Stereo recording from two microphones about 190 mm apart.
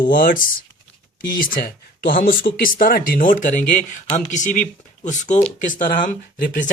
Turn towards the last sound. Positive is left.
turn(degrees=45)  # may be behind; listen again after turning